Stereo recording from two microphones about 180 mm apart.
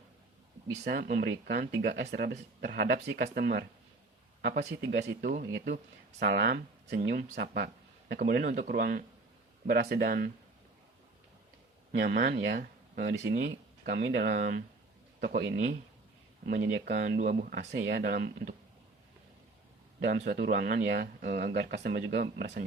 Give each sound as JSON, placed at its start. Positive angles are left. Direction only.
{"t": 0.9, "sound": "speech", "side_deg": -55}
{"t": 9.6, "sound": "speech", "side_deg": -65}
{"t": 11.9, "sound": "speech", "side_deg": -60}
{"t": 16.5, "sound": "speech", "side_deg": -60}
{"t": 20.1, "sound": "speech", "side_deg": -65}